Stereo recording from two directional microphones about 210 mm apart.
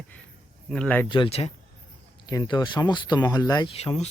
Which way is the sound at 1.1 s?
25° left (ahead or behind).